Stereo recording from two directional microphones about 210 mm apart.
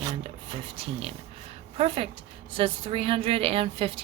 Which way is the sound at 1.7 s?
30° right (ahead or behind).